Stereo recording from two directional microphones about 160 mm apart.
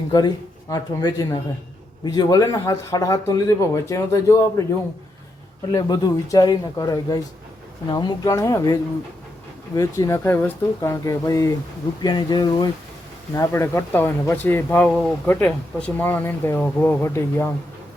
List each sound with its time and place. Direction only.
0.1 s speech: 25° left (ahead or behind)
5.7 s speech: 20° left (ahead or behind)